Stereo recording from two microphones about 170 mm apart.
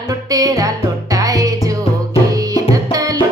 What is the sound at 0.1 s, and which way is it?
Music, 20° right (ahead or behind).